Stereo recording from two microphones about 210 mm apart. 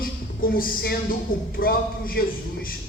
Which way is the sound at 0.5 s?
45° left (ahead or behind).